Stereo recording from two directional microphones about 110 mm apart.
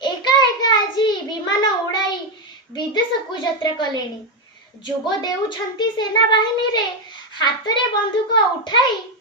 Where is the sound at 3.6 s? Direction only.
40° left (ahead or behind).